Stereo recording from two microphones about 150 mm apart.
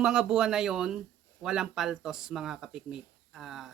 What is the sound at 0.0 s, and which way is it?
Speech, 5° right (ahead or behind).